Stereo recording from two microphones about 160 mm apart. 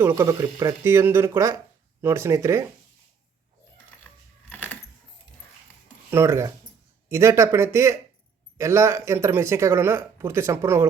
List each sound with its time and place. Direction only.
0.0 s speech: 20° right (ahead or behind)
4.5 s keys jangling: 10° left (ahead or behind)
6.1 s speech: 15° right (ahead or behind)